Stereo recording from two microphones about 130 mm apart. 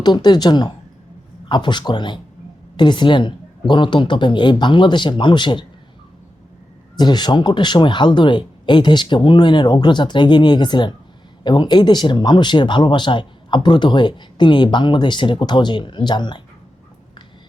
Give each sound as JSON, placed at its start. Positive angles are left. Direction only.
{"t": 0.0, "sound": "speech", "side_deg": 35}
{"t": 6.9, "sound": "speech", "side_deg": 35}